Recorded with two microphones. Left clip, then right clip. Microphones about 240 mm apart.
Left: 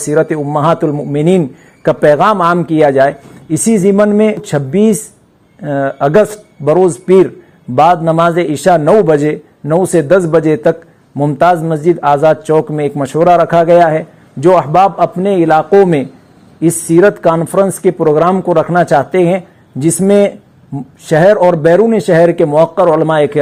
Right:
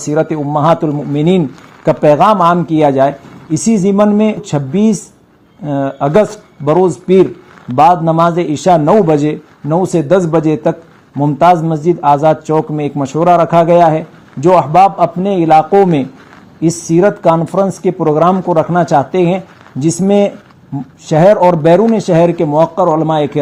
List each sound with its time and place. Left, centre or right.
0.0 s a man's voice: left